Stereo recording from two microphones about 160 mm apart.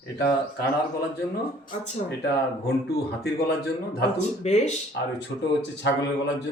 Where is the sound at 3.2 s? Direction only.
80° left.